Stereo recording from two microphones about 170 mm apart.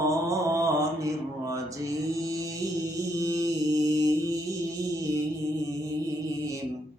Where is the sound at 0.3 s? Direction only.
20° right (ahead or behind).